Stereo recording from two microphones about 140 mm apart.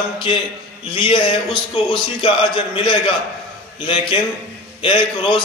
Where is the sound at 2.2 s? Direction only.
35° left (ahead or behind).